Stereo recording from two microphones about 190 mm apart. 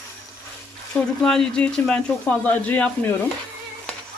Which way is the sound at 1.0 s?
5° left (ahead or behind).